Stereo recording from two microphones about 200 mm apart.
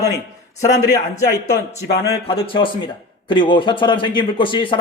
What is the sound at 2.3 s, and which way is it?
Speech, 25° left (ahead or behind).